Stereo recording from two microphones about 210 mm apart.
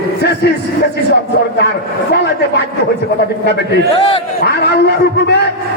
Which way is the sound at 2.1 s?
50° left (ahead or behind).